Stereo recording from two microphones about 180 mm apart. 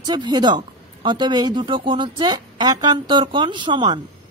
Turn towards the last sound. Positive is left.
turn(degrees=-25)  # may be behind; listen again after turning